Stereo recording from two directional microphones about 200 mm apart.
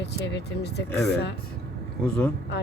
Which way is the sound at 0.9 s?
5° left (ahead or behind).